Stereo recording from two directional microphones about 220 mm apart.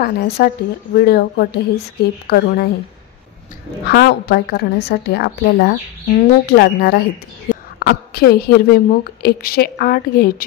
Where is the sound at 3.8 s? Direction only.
45° left (ahead or behind).